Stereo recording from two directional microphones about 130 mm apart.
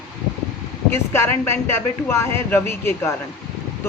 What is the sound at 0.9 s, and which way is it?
Speech, 20° left (ahead or behind).